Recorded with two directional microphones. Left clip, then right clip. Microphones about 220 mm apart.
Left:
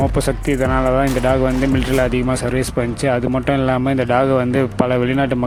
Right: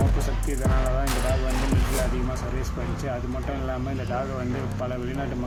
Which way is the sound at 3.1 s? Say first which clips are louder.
Left 14 dB; 45° left (ahead or behind).